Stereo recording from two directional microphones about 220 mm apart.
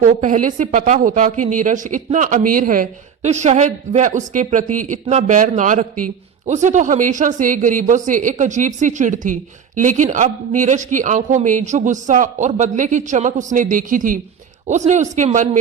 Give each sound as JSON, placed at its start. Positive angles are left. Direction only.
{"t": 0.0, "sound": "speech", "side_deg": -35}